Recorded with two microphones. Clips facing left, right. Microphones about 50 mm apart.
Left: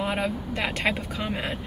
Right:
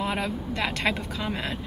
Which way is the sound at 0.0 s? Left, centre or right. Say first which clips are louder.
Left 1 dB; centre.